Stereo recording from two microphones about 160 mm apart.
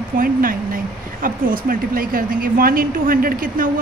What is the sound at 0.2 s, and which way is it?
Speech, 60° right (ahead or behind).